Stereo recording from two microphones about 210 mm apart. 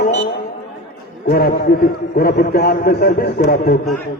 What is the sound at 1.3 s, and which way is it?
A man's voice, 45° left (ahead or behind).